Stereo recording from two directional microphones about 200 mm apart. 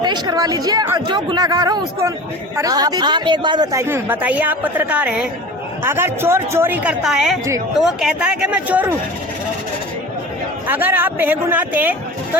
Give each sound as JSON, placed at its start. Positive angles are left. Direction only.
{"t": 0.0, "sound": "speech", "side_deg": -20}
{"t": 10.7, "sound": "speech", "side_deg": -10}